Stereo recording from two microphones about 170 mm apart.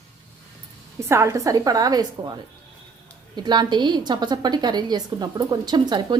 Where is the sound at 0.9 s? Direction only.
15° right (ahead or behind).